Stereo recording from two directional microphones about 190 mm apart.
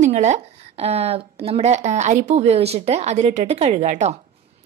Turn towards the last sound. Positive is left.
turn(degrees=-35)  # may be behind; listen again after turning